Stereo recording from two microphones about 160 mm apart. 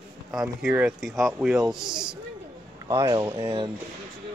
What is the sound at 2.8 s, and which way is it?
Speech, 20° right (ahead or behind).